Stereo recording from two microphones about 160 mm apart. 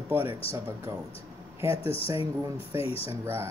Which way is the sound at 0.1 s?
15° right (ahead or behind).